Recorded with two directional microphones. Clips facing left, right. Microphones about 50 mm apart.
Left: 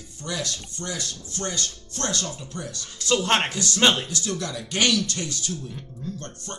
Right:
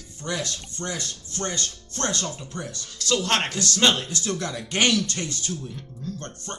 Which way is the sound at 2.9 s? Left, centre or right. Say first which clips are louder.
Left 2 dB; left.